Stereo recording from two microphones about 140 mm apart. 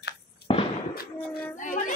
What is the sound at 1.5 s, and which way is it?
Speech, 65° left (ahead or behind).